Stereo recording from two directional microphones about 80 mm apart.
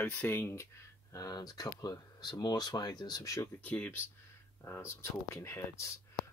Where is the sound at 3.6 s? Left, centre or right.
Left.